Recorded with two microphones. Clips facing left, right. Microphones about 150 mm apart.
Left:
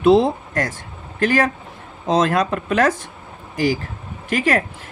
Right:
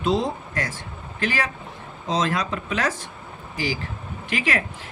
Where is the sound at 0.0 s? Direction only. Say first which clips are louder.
Left 9 dB; 60° left (ahead or behind).